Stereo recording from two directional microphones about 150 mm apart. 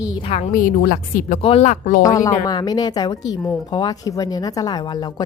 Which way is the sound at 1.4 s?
40° left (ahead or behind).